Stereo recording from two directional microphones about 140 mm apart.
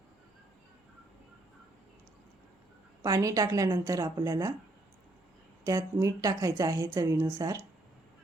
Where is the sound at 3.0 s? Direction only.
25° right (ahead or behind).